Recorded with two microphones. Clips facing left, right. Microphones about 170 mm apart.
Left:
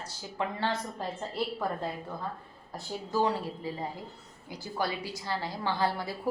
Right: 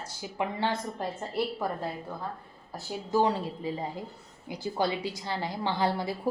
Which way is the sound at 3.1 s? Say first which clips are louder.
Right 3 dB; 20° right (ahead or behind).